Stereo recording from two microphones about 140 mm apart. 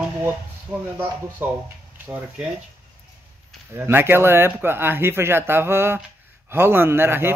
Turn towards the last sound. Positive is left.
turn(degrees=-15)  # may be behind; listen again after turning